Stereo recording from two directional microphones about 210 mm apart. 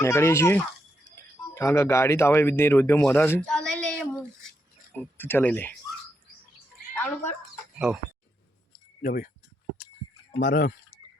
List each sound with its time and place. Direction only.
0.0 s speech: 10° left (ahead or behind)
5.1 s speech: 10° left (ahead or behind)
6.9 s speech: 10° left (ahead or behind)
9.0 s speech: 40° left (ahead or behind)
10.4 s speech: 45° left (ahead or behind)